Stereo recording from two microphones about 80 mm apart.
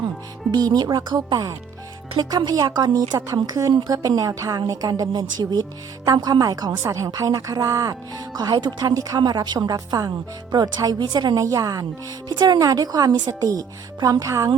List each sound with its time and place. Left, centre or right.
0.5 s a woman's voice: right
11.4 s a woman's voice: right
12.3 s speech: right
12.5 s a woman's voice: right
13.5 s a woman's voice: right